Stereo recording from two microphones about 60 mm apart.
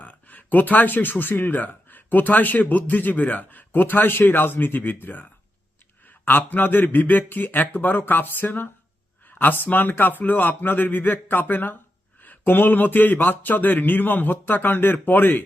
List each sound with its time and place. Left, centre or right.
0.0 s speech: left